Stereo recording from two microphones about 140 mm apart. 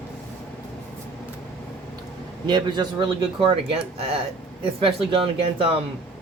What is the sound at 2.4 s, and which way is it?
Speech, 30° right (ahead or behind).